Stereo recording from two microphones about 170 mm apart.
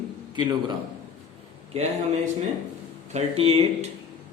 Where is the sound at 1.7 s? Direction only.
40° right (ahead or behind).